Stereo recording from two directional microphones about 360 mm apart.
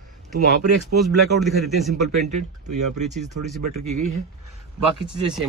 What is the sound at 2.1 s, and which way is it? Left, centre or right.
Speech, right.